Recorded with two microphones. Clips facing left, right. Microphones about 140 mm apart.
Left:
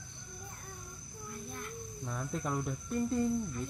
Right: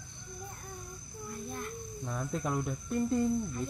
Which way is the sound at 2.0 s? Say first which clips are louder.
Right 2 dB; 5° right (ahead or behind).